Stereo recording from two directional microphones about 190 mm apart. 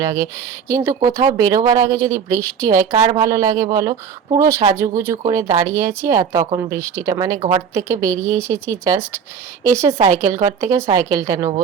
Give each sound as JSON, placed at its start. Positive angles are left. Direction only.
{"t": 0.0, "sound": "speech", "side_deg": -15}
{"t": 7.3, "sound": "speech", "side_deg": -35}
{"t": 7.7, "sound": "speech", "side_deg": -15}